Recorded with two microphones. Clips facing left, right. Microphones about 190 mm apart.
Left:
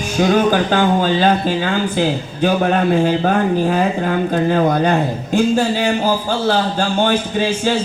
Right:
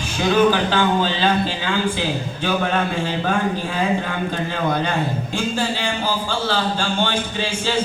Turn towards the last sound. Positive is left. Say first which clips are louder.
# left 5 dB
turn(degrees=40)  # may be behind; listen again after turning